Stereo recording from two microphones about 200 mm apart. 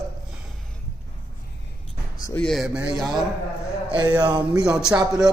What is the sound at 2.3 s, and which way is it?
Speech, centre (ahead or behind).